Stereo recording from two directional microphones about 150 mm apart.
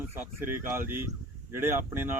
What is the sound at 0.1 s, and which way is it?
Speech, 15° right (ahead or behind).